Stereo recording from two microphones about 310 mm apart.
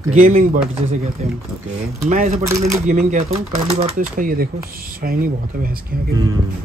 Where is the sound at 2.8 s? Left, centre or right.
Right.